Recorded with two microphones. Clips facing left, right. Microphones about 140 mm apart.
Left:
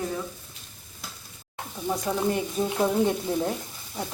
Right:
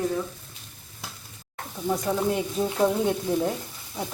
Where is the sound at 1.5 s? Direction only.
Centre (ahead or behind).